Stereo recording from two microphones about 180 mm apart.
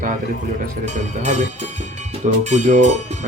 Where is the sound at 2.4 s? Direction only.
40° right (ahead or behind).